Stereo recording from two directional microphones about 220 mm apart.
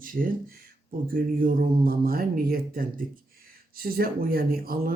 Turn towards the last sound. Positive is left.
turn(degrees=-40)  # may be behind; listen again after turning